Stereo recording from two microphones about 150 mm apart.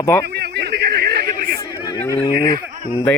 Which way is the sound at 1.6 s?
30° left (ahead or behind).